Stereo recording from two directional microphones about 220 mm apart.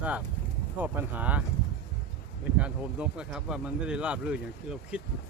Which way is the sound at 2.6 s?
5° right (ahead or behind).